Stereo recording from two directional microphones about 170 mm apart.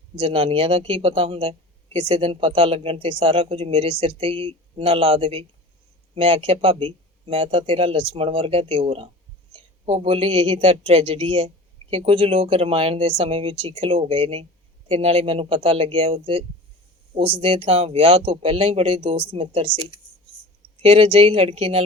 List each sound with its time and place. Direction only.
0.2 s speech: 30° right (ahead or behind)
17.4 s speech: 35° right (ahead or behind)
20.8 s speech: 35° right (ahead or behind)